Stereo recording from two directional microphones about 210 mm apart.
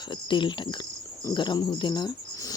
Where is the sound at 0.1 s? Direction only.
20° left (ahead or behind).